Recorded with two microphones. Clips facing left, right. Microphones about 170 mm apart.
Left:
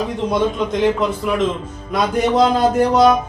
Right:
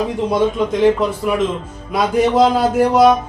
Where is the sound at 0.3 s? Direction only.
5° right (ahead or behind).